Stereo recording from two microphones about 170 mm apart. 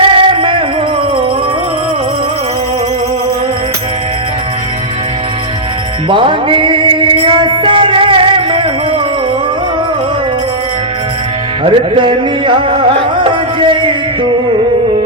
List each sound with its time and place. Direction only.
0.0 s music: 30° right (ahead or behind)
6.1 s music: 30° right (ahead or behind)
11.6 s music: 30° right (ahead or behind)